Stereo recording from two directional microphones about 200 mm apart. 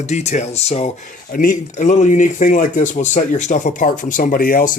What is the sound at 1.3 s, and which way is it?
Speech, 45° left (ahead or behind).